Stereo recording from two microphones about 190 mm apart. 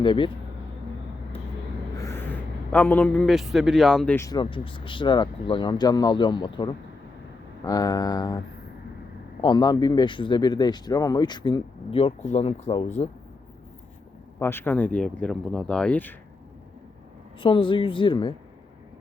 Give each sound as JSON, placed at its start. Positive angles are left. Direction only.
{"t": 0.0, "sound": "a man's voice", "side_deg": 25}
{"t": 2.0, "sound": "a man's voice", "side_deg": 15}
{"t": 9.4, "sound": "a man's voice", "side_deg": 20}
{"t": 14.3, "sound": "speech", "side_deg": 10}
{"t": 17.4, "sound": "a man's voice", "side_deg": 25}